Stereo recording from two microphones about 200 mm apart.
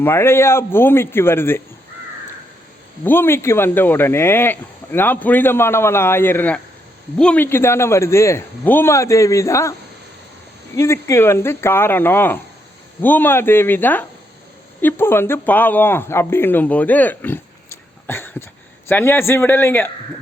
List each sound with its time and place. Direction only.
0.0 s speech: 10° left (ahead or behind)
3.0 s speech: 10° left (ahead or behind)
10.8 s speech: 15° left (ahead or behind)